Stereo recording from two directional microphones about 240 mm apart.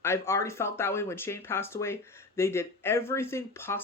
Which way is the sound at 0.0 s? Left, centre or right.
Centre.